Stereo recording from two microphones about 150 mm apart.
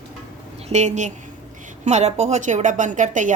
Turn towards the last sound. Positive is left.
turn(degrees=-55)  # may be behind; listen again after turning